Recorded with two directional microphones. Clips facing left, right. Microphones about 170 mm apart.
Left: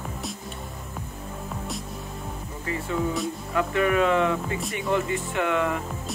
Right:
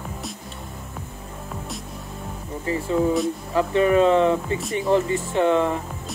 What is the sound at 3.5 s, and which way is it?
Speech, 30° right (ahead or behind).